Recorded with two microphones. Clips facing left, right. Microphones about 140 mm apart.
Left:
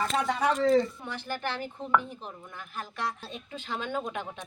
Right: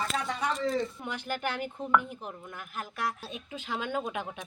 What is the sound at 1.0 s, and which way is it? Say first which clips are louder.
Speech: right 1 dB; 15° right (ahead or behind).